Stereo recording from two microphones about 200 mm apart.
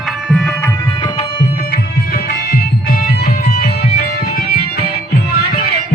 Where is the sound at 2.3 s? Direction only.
50° left (ahead or behind).